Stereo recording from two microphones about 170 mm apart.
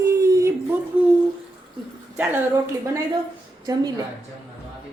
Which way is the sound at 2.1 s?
10° right (ahead or behind).